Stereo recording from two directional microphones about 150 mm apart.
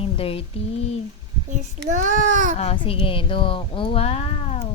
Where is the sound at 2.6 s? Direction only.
40° left (ahead or behind).